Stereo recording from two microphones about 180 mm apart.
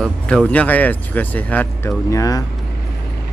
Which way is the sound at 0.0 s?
5° left (ahead or behind).